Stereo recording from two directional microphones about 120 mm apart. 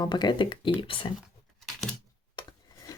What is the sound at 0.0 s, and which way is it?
Speech, 35° left (ahead or behind).